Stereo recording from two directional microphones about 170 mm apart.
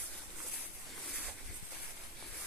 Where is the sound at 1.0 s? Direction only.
Centre (ahead or behind).